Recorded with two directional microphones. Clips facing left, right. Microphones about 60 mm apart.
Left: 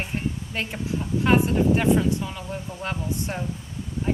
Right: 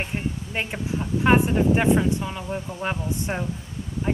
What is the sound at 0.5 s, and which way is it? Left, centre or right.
Speech, centre.